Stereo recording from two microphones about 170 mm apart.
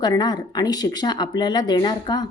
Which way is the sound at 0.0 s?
25° left (ahead or behind).